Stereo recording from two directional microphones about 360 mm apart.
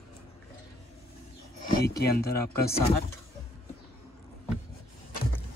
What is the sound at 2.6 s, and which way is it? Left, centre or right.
Speech, centre.